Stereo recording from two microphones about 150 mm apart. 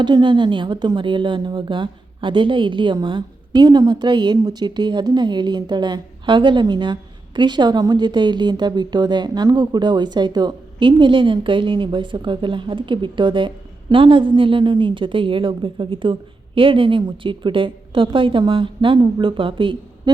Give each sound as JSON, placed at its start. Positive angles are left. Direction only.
{"t": 0.0, "sound": "speech", "side_deg": -30}